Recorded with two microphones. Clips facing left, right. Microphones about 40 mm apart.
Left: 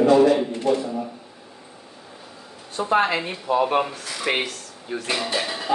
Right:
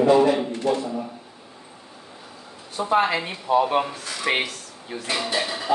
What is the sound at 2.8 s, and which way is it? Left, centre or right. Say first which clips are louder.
Speech: even; left.